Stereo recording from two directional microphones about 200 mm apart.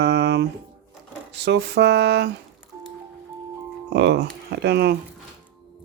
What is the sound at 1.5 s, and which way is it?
Speech, 55° right (ahead or behind).